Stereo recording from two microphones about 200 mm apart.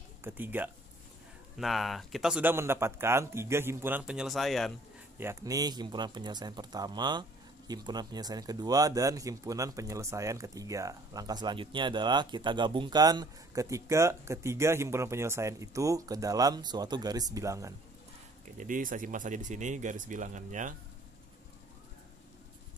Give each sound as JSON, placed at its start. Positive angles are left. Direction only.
{"t": 0.2, "sound": "speech", "side_deg": -10}
{"t": 5.2, "sound": "speech", "side_deg": -15}
{"t": 18.6, "sound": "speech", "side_deg": -40}